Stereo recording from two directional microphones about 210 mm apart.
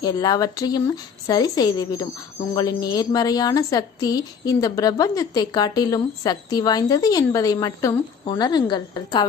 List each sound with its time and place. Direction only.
0.0 s a woman's voice: 20° left (ahead or behind)